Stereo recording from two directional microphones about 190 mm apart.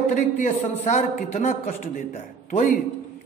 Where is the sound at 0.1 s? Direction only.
40° left (ahead or behind).